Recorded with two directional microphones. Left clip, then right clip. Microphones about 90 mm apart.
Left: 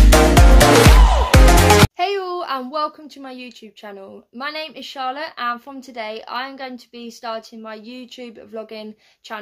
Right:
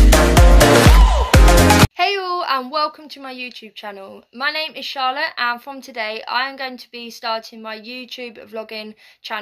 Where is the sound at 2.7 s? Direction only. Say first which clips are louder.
Right 3 dB; 35° left (ahead or behind).